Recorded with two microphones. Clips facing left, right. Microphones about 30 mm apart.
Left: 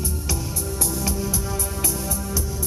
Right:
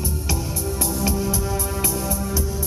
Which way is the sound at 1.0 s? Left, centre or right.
Centre.